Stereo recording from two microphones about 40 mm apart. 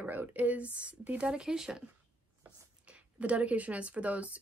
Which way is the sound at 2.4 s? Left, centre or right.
Right.